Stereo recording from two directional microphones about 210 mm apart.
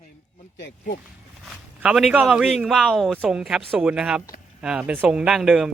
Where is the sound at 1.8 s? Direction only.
5° right (ahead or behind).